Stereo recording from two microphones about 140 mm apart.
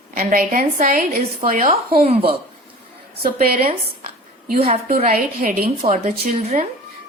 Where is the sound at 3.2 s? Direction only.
90° right.